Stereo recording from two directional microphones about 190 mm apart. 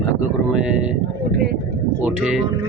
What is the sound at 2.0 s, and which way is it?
Speech, 5° right (ahead or behind).